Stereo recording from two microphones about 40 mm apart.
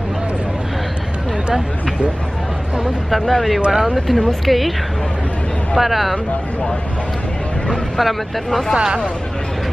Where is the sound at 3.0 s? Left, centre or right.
Centre.